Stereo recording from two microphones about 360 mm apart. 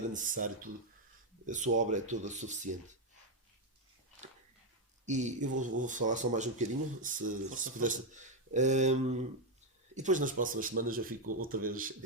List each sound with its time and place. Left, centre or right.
0.1 s speech: right
5.0 s speech: centre